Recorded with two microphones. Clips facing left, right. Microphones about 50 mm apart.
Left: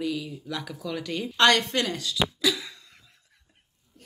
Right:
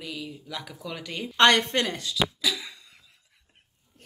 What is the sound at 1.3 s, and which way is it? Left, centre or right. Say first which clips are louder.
Speech: right 1 dB; right.